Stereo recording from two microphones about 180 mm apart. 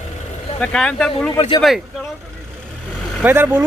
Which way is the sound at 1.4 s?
25° left (ahead or behind).